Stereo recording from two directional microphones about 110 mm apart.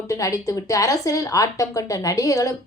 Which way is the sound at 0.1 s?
30° left (ahead or behind).